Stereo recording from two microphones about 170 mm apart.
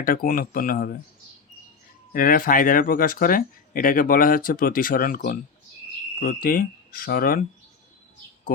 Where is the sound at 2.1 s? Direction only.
55° left (ahead or behind).